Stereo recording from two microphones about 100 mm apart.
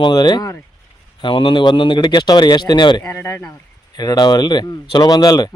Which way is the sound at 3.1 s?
25° left (ahead or behind).